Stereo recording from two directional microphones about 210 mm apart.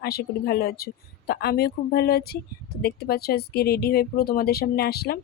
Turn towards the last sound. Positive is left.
turn(degrees=50)  # may be behind; listen again after turning